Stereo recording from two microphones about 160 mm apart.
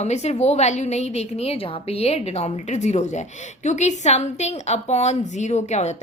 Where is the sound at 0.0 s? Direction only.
45° left (ahead or behind).